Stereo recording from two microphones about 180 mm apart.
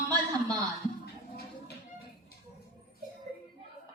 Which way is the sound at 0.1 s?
20° right (ahead or behind).